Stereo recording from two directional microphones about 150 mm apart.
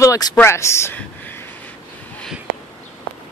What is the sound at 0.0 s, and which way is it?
Speech, 25° left (ahead or behind).